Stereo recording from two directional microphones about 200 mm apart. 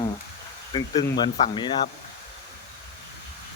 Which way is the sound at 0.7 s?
20° left (ahead or behind).